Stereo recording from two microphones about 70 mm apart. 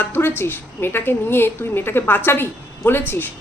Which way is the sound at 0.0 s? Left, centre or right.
Left.